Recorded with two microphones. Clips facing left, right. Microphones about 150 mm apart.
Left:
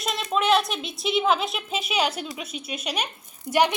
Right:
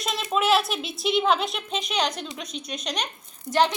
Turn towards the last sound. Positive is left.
turn(degrees=10)  # may be behind; listen again after turning